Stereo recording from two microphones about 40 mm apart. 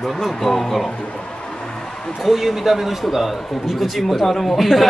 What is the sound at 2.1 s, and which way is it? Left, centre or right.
Speech, centre.